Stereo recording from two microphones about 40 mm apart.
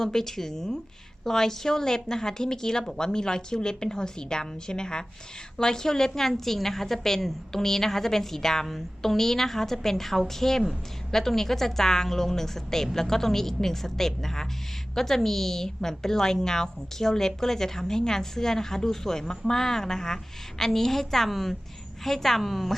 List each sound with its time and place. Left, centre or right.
0.0 s a woman's voice: centre